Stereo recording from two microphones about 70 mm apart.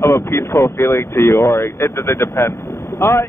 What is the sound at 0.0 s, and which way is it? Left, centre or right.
Vehicle, left.